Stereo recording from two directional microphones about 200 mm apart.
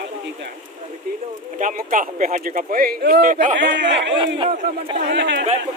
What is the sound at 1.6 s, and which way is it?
Speech, 40° right (ahead or behind).